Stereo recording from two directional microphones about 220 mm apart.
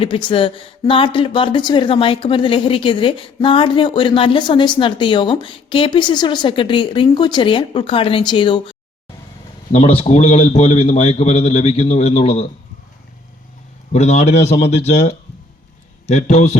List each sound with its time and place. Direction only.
0.0 s speech: 25° left (ahead or behind)
9.7 s speech: 25° left (ahead or behind)
13.9 s a man's voice: 30° left (ahead or behind)